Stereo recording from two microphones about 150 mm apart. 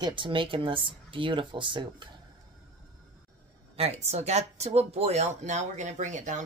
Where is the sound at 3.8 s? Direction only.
45° right (ahead or behind).